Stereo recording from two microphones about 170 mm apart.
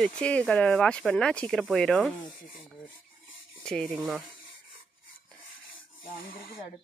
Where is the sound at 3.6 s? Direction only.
5° left (ahead or behind).